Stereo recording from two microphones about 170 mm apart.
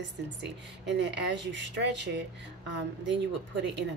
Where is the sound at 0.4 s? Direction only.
90° right.